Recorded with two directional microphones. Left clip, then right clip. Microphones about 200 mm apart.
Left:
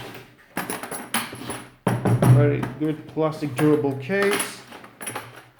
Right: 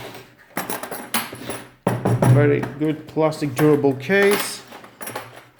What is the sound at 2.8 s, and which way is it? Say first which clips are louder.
Speech: right 1 dB; 45° right (ahead or behind).